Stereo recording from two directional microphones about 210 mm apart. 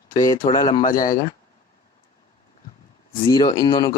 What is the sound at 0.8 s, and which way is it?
Speech, 40° left (ahead or behind).